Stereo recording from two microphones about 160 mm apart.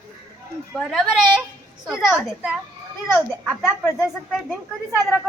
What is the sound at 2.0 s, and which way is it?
Speech, 5° right (ahead or behind).